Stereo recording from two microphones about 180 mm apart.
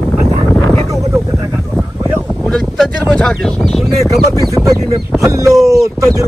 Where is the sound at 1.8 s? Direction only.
10° right (ahead or behind).